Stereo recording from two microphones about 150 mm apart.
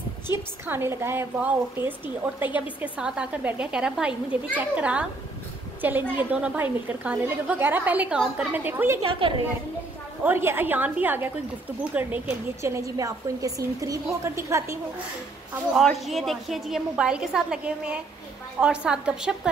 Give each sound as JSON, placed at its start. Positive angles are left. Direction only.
{"t": 0.3, "sound": "a woman's voice", "side_deg": -15}
{"t": 9.2, "sound": "a woman's voice", "side_deg": -35}
{"t": 10.2, "sound": "a woman's voice", "side_deg": -15}
{"t": 15.7, "sound": "a woman's voice", "side_deg": 0}